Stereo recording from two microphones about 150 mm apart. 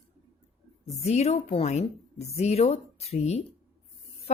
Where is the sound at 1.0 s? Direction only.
45° left (ahead or behind).